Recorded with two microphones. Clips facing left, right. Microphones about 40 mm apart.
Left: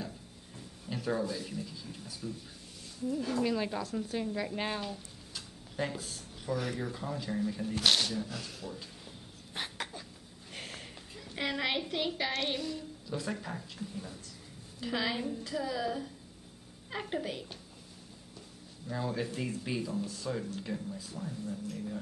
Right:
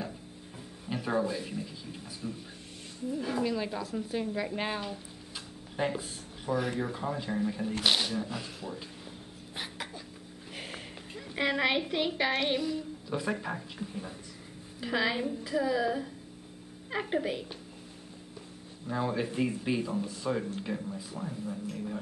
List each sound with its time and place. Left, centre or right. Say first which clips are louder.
0.8 s a woman's voice: right 3 dB; right
3.4 s speech: even; centre
9.6 s a sound: left 1 dB; centre
10.5 s a woman's voice: right 2 dB; centre
18.9 s speech: right 4 dB; right